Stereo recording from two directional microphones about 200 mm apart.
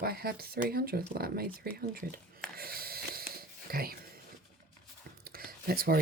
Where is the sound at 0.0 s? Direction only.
50° right (ahead or behind).